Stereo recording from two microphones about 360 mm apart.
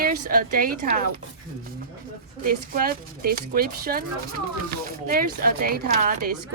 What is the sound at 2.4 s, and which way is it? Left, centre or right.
Speech, right.